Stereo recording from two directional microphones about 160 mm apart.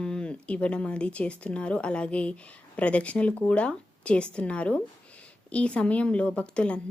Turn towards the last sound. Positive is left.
turn(degrees=5)  # may be behind; listen again after turning